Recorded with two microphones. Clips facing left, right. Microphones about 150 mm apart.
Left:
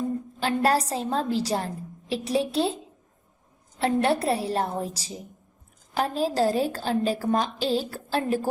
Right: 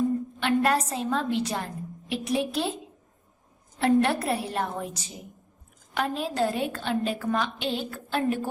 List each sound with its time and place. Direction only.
0.3 s a woman's voice: 35° left (ahead or behind)
3.8 s a woman's voice: 30° left (ahead or behind)